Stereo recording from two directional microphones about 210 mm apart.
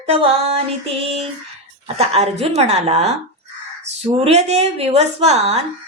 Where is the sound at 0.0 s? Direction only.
30° right (ahead or behind).